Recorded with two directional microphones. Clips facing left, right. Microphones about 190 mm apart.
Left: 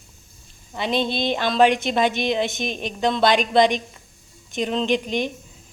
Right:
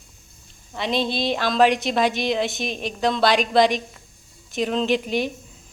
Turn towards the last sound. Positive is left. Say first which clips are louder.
# even
turn(degrees=-5)  # may be behind; listen again after turning